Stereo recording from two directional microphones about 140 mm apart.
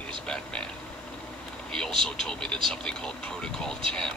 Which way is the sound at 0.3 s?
5° left (ahead or behind).